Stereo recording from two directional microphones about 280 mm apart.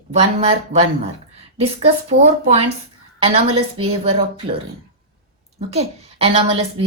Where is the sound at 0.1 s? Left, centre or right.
Right.